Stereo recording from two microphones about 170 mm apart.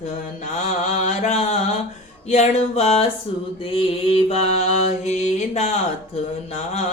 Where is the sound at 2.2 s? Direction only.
40° left (ahead or behind).